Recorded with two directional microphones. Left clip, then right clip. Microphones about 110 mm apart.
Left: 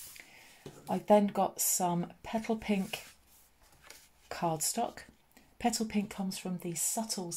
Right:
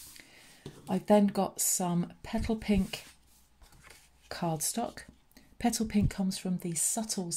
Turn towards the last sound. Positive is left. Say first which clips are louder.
# right 2 dB
turn(degrees=-50)  # may be behind; listen again after turning